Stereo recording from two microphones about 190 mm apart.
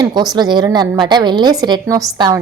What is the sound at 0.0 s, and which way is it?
A woman's voice, 20° right (ahead or behind).